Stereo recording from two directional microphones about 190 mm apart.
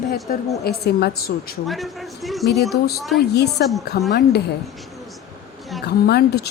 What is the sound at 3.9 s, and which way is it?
Speech, 55° left (ahead or behind).